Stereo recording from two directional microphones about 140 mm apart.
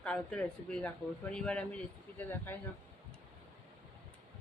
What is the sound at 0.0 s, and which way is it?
A man's voice, 5° left (ahead or behind).